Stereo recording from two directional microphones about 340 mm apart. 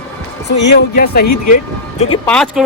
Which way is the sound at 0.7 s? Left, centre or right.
Left.